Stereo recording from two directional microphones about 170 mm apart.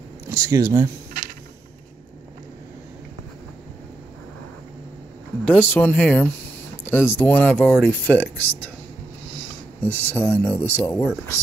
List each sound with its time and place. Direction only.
0.3 s speech: 15° right (ahead or behind)
5.4 s speech: 10° left (ahead or behind)
9.8 s speech: 10° left (ahead or behind)